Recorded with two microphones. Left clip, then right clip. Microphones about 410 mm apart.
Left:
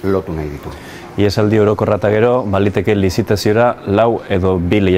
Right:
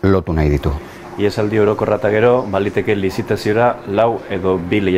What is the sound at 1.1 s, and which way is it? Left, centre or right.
Speech, left.